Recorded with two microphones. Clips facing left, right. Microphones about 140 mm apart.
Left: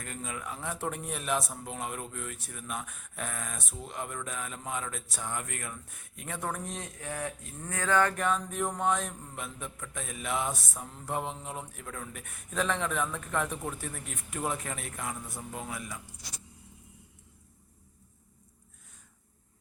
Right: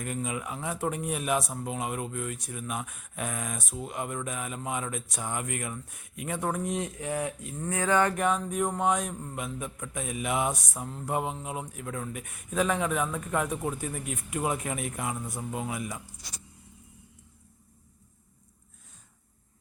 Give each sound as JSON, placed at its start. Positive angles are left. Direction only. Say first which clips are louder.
{"t": 0.0, "sound": "a man's voice", "louder": "right 6 dB", "side_deg": -10}